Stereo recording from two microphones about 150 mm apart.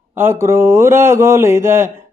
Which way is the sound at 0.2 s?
15° right (ahead or behind).